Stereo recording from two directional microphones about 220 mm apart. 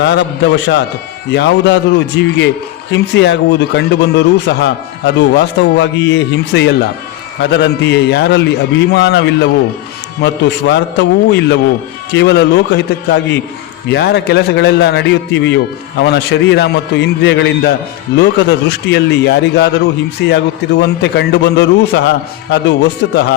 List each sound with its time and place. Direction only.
0.0 s speech: 50° left (ahead or behind)